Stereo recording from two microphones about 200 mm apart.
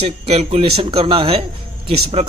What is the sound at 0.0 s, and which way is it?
A man's voice, 30° right (ahead or behind).